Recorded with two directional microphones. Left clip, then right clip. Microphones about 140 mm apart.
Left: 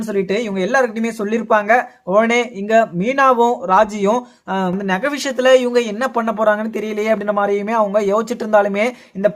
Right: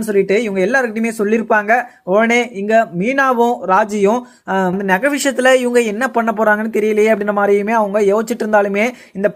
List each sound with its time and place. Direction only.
0.1 s speech: 25° right (ahead or behind)
3.3 s speech: centre (ahead or behind)
3.7 s speech: 25° right (ahead or behind)